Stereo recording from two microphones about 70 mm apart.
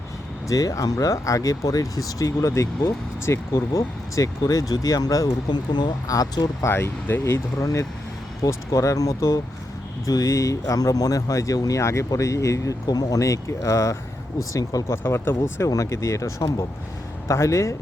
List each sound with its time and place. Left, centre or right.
0.4 s speech: left
5.5 s speech: left
6.7 s speech: left
7.6 s speech: left
11.8 s speech: left
12.9 s speech: left
14.9 s speech: left
15.7 s speech: left